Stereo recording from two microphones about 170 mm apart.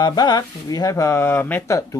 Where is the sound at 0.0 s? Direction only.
25° left (ahead or behind).